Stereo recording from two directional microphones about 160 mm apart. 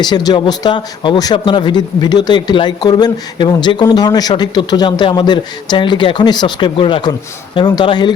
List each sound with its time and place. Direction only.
0.0 s speech: 25° left (ahead or behind)